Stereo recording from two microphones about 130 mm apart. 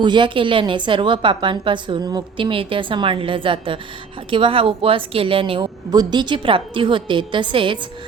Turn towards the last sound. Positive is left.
turn(degrees=-40)  # may be behind; listen again after turning